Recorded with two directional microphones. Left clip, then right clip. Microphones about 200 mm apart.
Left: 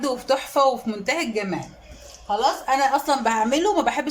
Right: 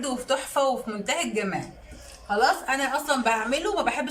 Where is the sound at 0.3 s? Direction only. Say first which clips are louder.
Left 5 dB; 25° left (ahead or behind).